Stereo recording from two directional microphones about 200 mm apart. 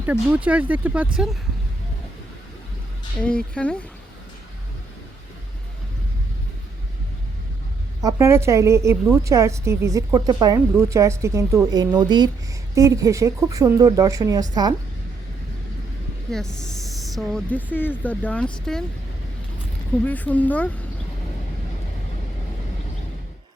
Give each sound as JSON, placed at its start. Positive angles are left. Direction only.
{"t": 0.0, "sound": "a woman's voice", "side_deg": -5}
{"t": 3.2, "sound": "speech", "side_deg": 5}
{"t": 8.0, "sound": "a woman's voice", "side_deg": -15}
{"t": 16.3, "sound": "speech", "side_deg": 0}
{"t": 20.1, "sound": "speech", "side_deg": 10}